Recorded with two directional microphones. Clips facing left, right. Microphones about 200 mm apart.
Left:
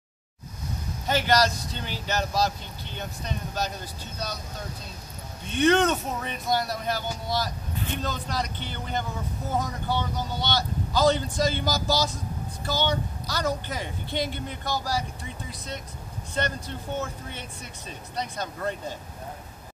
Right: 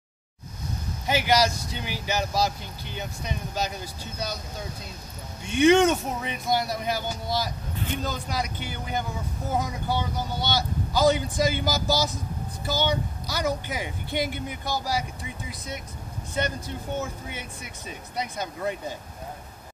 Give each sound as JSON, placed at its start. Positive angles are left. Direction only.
{"t": 1.0, "sound": "speech", "side_deg": -10}
{"t": 5.4, "sound": "speech", "side_deg": -15}
{"t": 11.9, "sound": "speech", "side_deg": 15}
{"t": 12.6, "sound": "speech", "side_deg": -15}